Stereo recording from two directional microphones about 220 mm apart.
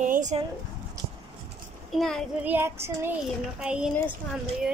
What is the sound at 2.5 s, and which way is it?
A child's voice, 10° right (ahead or behind).